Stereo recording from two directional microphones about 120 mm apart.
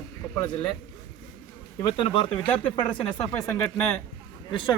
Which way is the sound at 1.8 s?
50° left (ahead or behind).